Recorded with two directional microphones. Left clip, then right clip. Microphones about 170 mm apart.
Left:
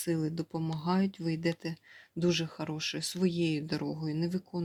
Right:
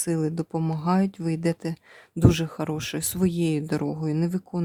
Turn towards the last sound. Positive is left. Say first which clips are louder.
# right 7 dB
turn(degrees=-40)  # may be behind; listen again after turning